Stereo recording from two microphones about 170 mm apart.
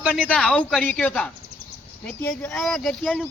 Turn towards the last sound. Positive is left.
turn(degrees=5)  # may be behind; listen again after turning